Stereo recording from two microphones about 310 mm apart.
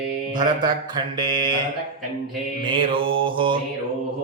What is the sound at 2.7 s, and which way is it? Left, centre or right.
Mantra, centre.